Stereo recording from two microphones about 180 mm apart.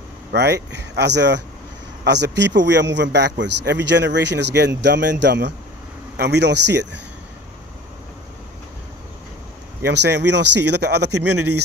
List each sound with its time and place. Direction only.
0.3 s speech: 65° right (ahead or behind)
9.8 s speech: 70° right (ahead or behind)